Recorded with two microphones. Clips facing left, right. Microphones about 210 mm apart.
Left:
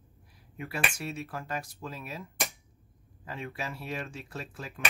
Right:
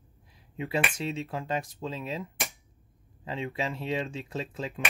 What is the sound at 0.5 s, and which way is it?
Speech, 20° right (ahead or behind).